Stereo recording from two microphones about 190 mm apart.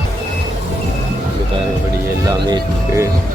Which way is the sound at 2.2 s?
15° right (ahead or behind).